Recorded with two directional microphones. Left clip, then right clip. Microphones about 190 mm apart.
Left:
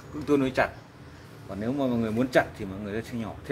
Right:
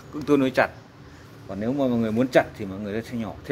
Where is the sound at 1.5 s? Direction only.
35° right (ahead or behind).